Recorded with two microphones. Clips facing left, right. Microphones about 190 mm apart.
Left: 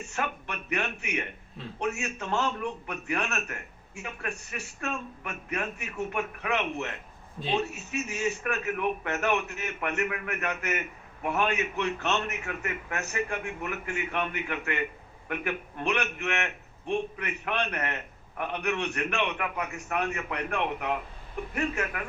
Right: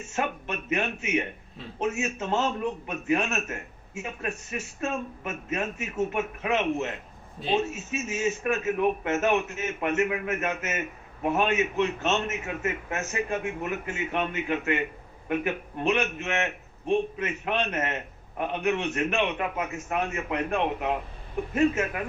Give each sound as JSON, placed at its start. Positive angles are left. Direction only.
{"t": 0.1, "sound": "a man's voice", "side_deg": -20}